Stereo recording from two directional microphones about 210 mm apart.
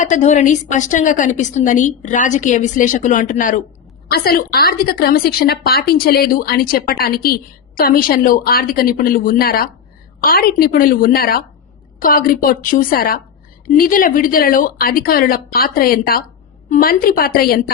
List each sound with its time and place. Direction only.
0.0 s a woman's voice: 35° left (ahead or behind)